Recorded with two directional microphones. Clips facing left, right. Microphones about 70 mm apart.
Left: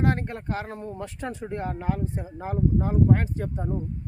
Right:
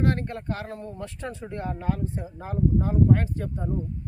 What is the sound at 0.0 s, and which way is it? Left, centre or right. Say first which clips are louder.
Speech: even; left.